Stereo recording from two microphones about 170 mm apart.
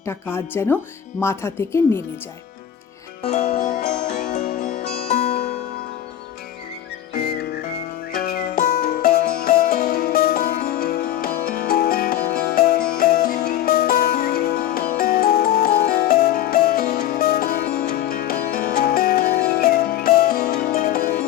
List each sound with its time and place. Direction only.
0.0 s speech: 15° left (ahead or behind)
3.4 s music: 60° left (ahead or behind)
7.1 s whistling: 70° left (ahead or behind)